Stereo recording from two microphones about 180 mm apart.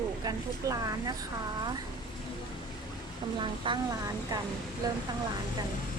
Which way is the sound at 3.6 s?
30° right (ahead or behind).